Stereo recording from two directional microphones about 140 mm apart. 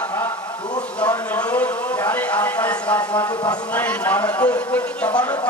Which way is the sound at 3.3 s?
30° left (ahead or behind).